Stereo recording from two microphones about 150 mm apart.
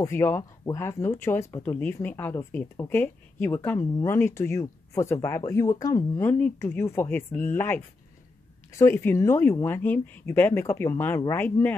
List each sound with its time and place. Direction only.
0.0 s speech: 15° left (ahead or behind)